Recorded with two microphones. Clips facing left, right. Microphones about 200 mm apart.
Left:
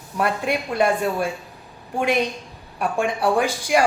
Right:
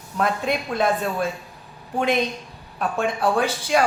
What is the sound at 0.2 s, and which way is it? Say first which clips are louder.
A woman's voice: left 1 dB; 10° left (ahead or behind).